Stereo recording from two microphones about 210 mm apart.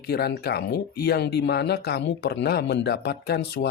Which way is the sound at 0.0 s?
50° left (ahead or behind).